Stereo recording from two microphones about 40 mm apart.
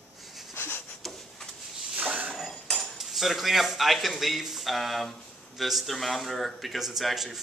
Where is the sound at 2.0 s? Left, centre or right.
Right.